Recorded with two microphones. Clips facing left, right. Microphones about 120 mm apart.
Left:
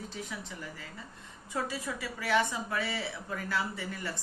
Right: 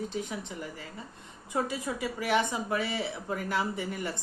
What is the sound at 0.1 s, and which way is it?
A woman's voice, 20° right (ahead or behind).